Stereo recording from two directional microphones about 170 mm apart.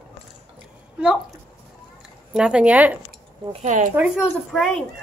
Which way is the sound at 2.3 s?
5° right (ahead or behind).